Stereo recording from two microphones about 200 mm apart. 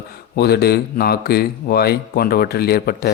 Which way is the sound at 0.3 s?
55° left (ahead or behind).